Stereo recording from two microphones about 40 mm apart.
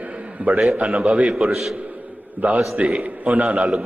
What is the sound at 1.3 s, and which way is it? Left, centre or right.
Speech, centre.